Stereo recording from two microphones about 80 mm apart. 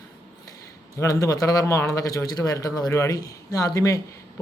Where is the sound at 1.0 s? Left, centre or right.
Left.